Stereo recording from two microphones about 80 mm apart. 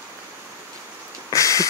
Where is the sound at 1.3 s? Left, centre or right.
Left.